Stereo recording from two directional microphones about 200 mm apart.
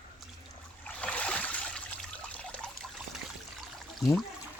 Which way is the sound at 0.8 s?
5° left (ahead or behind).